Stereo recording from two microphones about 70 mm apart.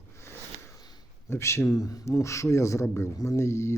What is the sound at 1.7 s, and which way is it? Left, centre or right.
Speech, left.